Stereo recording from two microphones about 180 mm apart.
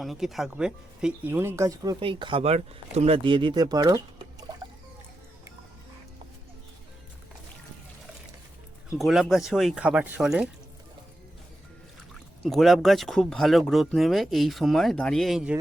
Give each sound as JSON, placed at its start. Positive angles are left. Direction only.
{"t": 0.0, "sound": "speech", "side_deg": 0}
{"t": 9.0, "sound": "speech", "side_deg": 0}
{"t": 12.4, "sound": "speech", "side_deg": 0}